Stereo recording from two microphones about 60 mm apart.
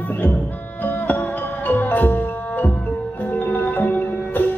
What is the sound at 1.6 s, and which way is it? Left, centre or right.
Music, left.